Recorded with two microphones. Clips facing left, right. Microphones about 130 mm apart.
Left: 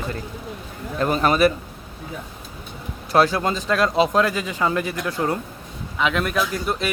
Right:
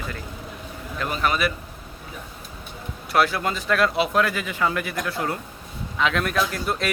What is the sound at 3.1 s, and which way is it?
Speech, 30° left (ahead or behind).